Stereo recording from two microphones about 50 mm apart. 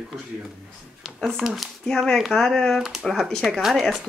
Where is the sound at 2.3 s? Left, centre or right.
Centre.